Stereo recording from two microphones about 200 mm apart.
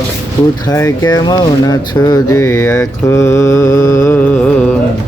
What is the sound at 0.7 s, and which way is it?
Speech, 15° left (ahead or behind).